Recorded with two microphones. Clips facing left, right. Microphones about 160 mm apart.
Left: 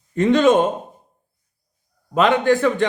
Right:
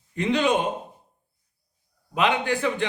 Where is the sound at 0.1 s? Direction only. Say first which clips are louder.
Left 8 dB; 45° left (ahead or behind).